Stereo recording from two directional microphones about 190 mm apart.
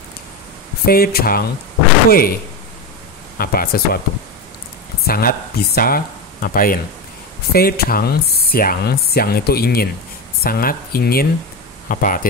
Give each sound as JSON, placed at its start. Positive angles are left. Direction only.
{"t": 0.8, "sound": "speech", "side_deg": 55}
{"t": 3.3, "sound": "speech", "side_deg": 50}
{"t": 5.0, "sound": "speech", "side_deg": 50}